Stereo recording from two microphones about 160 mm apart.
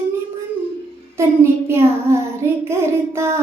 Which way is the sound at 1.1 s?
15° right (ahead or behind).